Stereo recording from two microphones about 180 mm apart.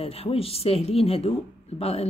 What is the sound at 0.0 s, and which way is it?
Speech, 35° left (ahead or behind).